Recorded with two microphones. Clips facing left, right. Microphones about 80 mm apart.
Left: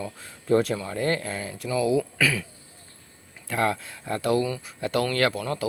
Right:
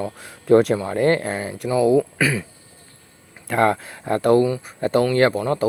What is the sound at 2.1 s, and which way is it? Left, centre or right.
Speech, right.